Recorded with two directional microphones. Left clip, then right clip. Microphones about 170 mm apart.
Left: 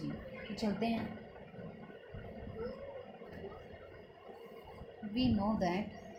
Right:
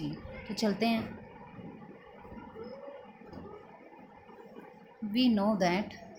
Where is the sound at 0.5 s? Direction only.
55° right (ahead or behind).